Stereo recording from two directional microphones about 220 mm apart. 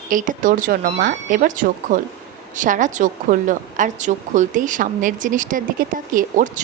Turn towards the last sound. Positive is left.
turn(degrees=-35)  # may be behind; listen again after turning